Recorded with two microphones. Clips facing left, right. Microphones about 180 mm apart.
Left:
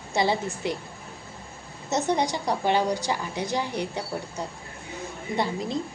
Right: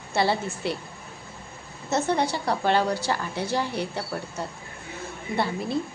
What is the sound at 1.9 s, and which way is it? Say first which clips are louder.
A woman's voice: even; 15° left (ahead or behind).